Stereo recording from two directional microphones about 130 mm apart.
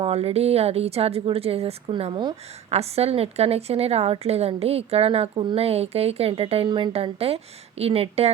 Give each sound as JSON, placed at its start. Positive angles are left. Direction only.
{"t": 0.0, "sound": "a woman's voice", "side_deg": -50}
{"t": 6.9, "sound": "a woman's voice", "side_deg": -50}